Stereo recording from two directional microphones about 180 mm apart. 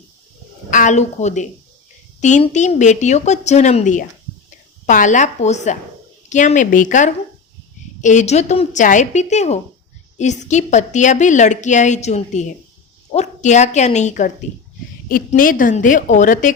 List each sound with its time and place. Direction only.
0.7 s a woman's voice: 45° left (ahead or behind)